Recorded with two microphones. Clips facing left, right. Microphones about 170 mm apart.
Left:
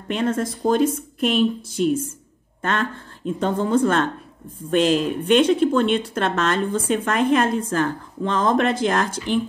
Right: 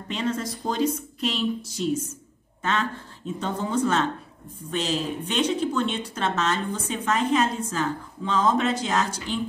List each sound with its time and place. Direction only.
0.1 s a woman's voice: 55° left (ahead or behind)